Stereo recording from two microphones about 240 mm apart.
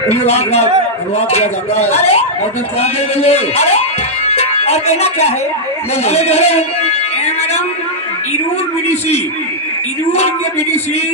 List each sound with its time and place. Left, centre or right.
0.1 s speech: left
4.3 s music: left
6.0 s speech: left
10.1 s speech: left